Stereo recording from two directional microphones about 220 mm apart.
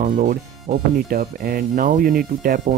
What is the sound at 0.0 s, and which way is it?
Speech, 40° right (ahead or behind).